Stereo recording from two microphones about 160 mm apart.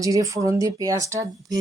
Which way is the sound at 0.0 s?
20° right (ahead or behind).